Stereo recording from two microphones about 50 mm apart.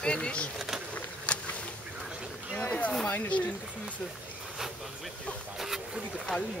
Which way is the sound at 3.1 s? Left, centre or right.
Left.